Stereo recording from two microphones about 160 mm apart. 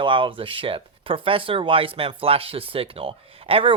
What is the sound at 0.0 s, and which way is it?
Speech, 30° right (ahead or behind).